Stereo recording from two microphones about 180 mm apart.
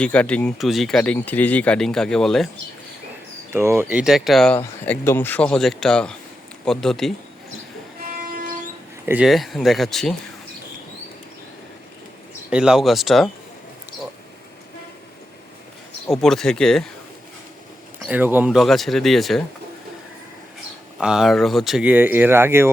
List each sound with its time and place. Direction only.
0.0 s speech: 5° left (ahead or behind)
3.5 s speech: 15° right (ahead or behind); by 7.1 s centre (ahead or behind)
8.2 s train: 50° right (ahead or behind)
9.0 s speech: 5° right (ahead or behind)
12.5 s speech: 5° right (ahead or behind)
16.1 s speech: centre (ahead or behind)
18.0 s speech: 10° right (ahead or behind)
21.0 s speech: 5° right (ahead or behind)